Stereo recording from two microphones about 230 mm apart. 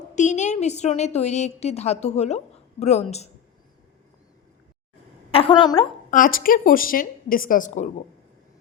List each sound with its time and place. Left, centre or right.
0.2 s a woman's voice: left
5.3 s a woman's voice: left
6.1 s a woman's voice: left